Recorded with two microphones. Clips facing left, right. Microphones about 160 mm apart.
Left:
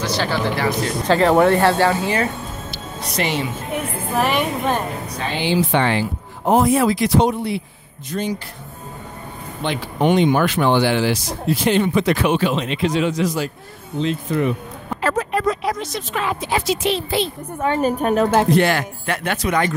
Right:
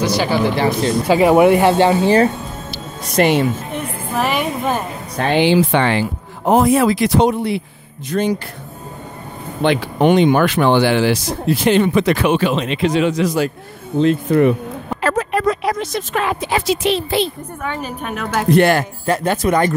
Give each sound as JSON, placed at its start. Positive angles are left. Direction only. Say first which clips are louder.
{"t": 0.0, "sound": "speech", "louder": "right 5 dB", "side_deg": -10}
{"t": 0.6, "sound": "speech", "louder": "right 4 dB", "side_deg": -25}
{"t": 1.0, "sound": "speech", "louder": "right 3 dB", "side_deg": -10}
{"t": 3.0, "sound": "speech", "louder": "right 8 dB", "side_deg": -55}
{"t": 3.7, "sound": "a woman's voice", "louder": "even", "side_deg": 0}
{"t": 5.1, "sound": "speech", "louder": "right 8 dB", "side_deg": -60}
{"t": 9.6, "sound": "speech", "louder": "right 6 dB", "side_deg": -65}
{"t": 13.9, "sound": "speech", "louder": "right 7 dB", "side_deg": -55}
{"t": 15.0, "sound": "speech", "louder": "right 2 dB", "side_deg": -75}
{"t": 17.8, "sound": "a woman's voice", "louder": "left 8 dB", "side_deg": 40}
{"t": 18.5, "sound": "speech", "louder": "right 4 dB", "side_deg": -55}